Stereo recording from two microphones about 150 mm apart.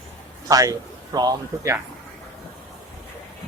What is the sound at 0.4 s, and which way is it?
Speech, 25° right (ahead or behind).